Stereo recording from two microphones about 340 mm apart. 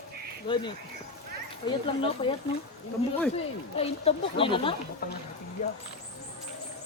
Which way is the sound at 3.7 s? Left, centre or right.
Centre.